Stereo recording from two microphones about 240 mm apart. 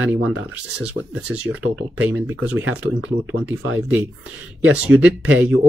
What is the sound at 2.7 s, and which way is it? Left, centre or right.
Speech, right.